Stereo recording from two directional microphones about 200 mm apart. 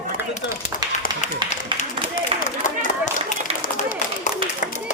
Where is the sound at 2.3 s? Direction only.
30° right (ahead or behind).